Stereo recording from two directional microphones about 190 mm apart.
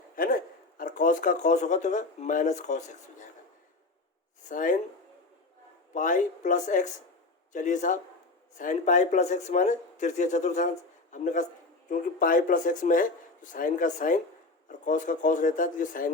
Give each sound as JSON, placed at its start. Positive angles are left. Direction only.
{"t": 0.2, "sound": "speech", "side_deg": 50}
{"t": 4.4, "sound": "speech", "side_deg": 45}
{"t": 5.9, "sound": "speech", "side_deg": 40}